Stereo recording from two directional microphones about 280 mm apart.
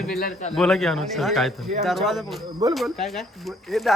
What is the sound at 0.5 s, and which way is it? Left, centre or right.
Speech, centre.